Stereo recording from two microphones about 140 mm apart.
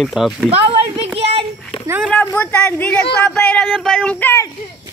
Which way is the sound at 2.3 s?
15° left (ahead or behind).